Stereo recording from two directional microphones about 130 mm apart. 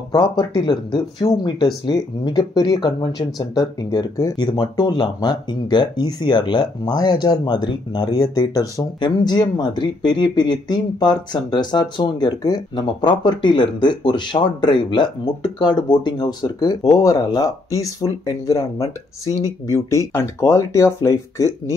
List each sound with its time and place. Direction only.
0.1 s speech: 35° left (ahead or behind)